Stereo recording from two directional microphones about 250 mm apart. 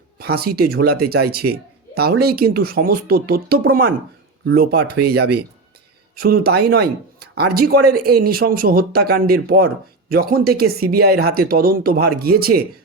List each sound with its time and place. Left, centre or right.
0.2 s speech: right